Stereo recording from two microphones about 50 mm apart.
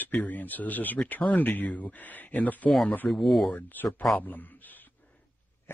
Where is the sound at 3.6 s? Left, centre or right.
Left.